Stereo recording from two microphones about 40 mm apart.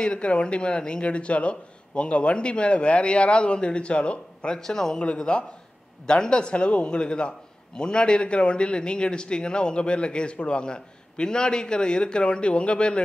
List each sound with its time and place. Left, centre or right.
0.0 s a man's voice: left
4.6 s a man's voice: centre
4.9 s a man's voice: left